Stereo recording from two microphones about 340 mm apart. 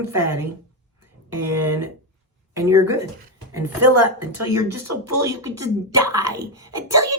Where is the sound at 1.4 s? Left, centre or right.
Right.